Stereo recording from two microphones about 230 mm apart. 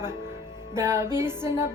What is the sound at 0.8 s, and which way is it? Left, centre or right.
Music, centre.